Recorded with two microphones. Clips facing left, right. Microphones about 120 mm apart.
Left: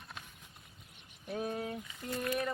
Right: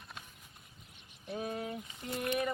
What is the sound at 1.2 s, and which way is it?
Speech, centre (ahead or behind).